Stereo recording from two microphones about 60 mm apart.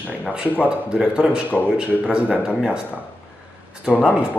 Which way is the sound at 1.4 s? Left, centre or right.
Left.